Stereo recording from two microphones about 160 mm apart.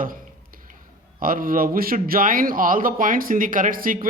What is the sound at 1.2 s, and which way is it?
Speech, 60° right (ahead or behind).